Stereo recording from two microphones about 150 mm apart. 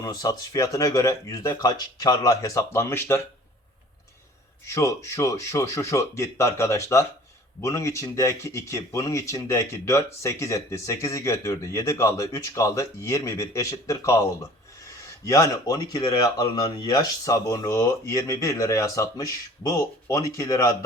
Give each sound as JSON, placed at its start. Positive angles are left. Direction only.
{"t": 0.0, "sound": "speech", "side_deg": 25}
{"t": 4.6, "sound": "speech", "side_deg": 20}